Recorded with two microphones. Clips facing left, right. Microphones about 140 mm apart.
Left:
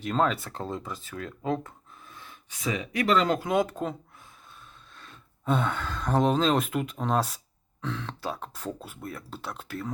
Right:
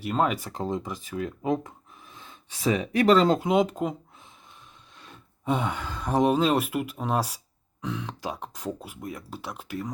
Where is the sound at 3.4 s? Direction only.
20° right (ahead or behind).